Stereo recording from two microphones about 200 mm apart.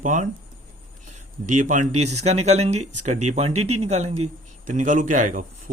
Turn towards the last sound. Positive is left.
turn(degrees=-40)  # may be behind; listen again after turning